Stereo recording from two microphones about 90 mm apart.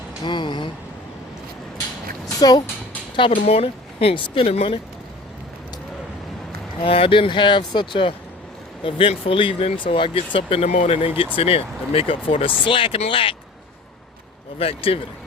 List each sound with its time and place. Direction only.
0.3 s speech: 60° left (ahead or behind)
2.2 s a sound: 45° left (ahead or behind)
3.2 s speech: 90° left
6.8 s speech: 90° left; by 8.1 s 65° left (ahead or behind)
8.8 s speech: 80° left
14.6 s speech: 90° left